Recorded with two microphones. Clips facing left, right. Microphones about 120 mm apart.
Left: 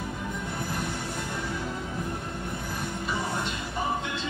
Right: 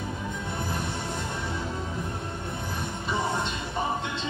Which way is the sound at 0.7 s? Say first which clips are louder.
Even; 25° right (ahead or behind).